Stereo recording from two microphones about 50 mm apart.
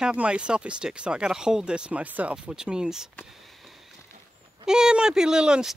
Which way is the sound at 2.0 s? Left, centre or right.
Right.